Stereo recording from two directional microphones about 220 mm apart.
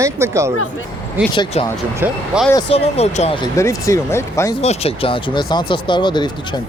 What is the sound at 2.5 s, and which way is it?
Speech, 25° left (ahead or behind).